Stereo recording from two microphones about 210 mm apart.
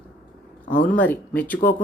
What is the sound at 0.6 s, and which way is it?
Speech, 40° left (ahead or behind).